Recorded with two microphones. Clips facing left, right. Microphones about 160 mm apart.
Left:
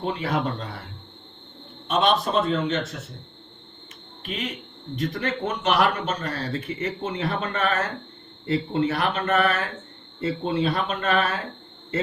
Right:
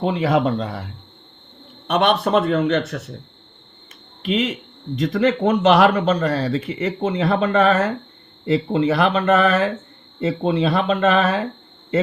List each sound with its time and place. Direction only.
0.0 s speech: 90° right
1.9 s speech: 65° right (ahead or behind)
2.9 s speech: 90° right
4.2 s a man's voice: 90° right; by 7.9 s 75° right (ahead or behind)
8.5 s speech: 90° right